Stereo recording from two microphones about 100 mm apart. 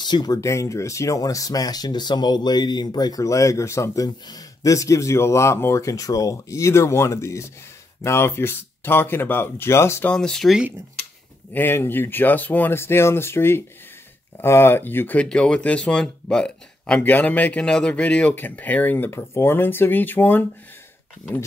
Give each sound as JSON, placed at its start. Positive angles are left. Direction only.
{"t": 0.0, "sound": "speech", "side_deg": 45}
{"t": 10.0, "sound": "speech", "side_deg": 5}
{"t": 11.5, "sound": "speech", "side_deg": 20}